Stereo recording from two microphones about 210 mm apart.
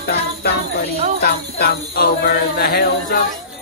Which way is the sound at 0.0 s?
50° left (ahead or behind).